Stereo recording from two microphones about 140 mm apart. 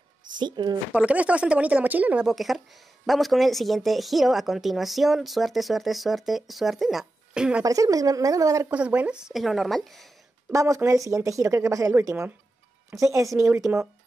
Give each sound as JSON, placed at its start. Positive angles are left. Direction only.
{"t": 0.4, "sound": "a woman's voice", "side_deg": -30}
{"t": 0.9, "sound": "speech", "side_deg": -10}
{"t": 7.6, "sound": "speech", "side_deg": -25}
{"t": 8.6, "sound": "speech", "side_deg": -10}
{"t": 10.5, "sound": "speech", "side_deg": -20}